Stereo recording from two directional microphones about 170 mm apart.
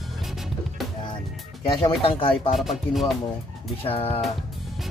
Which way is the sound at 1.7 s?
35° left (ahead or behind).